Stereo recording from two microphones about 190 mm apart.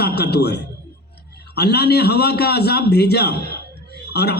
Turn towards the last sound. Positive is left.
turn(degrees=60)  # may be behind; listen again after turning